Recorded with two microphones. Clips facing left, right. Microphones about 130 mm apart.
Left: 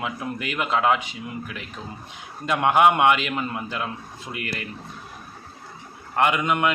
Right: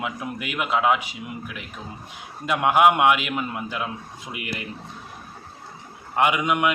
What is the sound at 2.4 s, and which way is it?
A man's voice, 10° right (ahead or behind).